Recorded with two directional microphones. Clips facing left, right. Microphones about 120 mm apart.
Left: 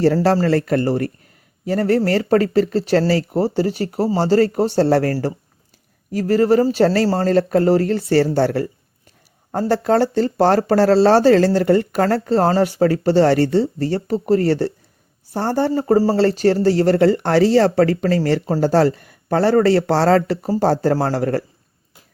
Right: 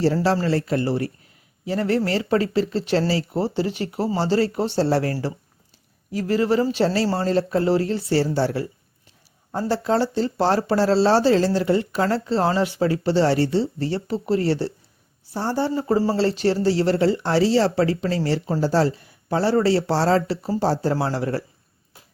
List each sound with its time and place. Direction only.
0.0 s speech: 55° left (ahead or behind)
16.1 s speech: 50° left (ahead or behind)